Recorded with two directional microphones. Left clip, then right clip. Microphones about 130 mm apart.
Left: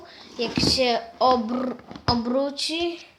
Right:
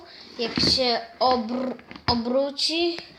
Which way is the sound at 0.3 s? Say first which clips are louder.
Even; 5° left (ahead or behind).